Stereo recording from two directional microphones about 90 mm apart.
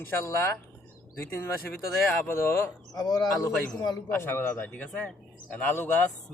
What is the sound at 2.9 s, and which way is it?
Speech, 45° left (ahead or behind).